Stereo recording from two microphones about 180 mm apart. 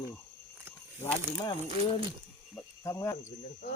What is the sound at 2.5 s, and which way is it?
Cricket, 15° left (ahead or behind).